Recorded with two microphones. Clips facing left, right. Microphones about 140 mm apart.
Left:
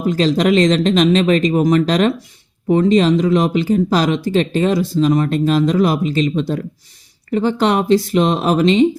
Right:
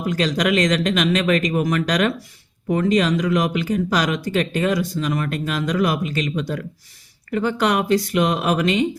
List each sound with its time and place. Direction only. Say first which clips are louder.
0.0 s speech: left 6 dB; 30° left (ahead or behind)